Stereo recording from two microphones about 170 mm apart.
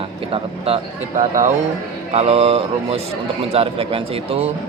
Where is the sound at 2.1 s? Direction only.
35° right (ahead or behind).